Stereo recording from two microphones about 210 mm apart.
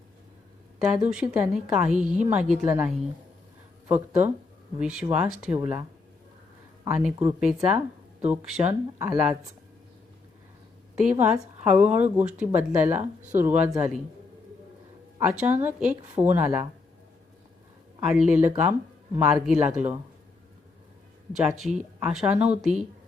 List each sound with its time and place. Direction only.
1.0 s speech: 5° right (ahead or behind)
6.8 s speech: 10° right (ahead or behind)
11.1 s speech: 10° right (ahead or behind)
13.0 s speech: 35° right (ahead or behind)
13.4 s speech: 10° right (ahead or behind)
15.2 s speech: 5° right (ahead or behind)
18.0 s speech: 5° right (ahead or behind)
21.4 s speech: centre (ahead or behind)